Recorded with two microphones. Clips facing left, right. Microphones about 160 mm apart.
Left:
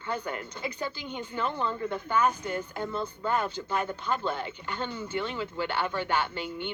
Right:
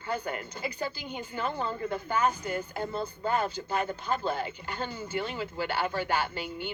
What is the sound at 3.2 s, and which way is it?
Speech, 40° right (ahead or behind).